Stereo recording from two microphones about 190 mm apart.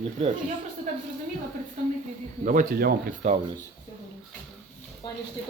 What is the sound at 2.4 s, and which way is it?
Speech, 45° right (ahead or behind).